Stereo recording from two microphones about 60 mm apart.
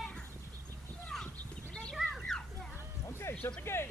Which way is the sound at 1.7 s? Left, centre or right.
Centre.